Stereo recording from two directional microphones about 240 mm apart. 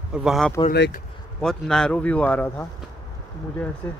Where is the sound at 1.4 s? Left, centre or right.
Centre.